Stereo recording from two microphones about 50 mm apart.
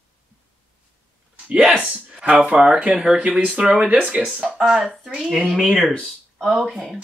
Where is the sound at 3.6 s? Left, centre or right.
Right.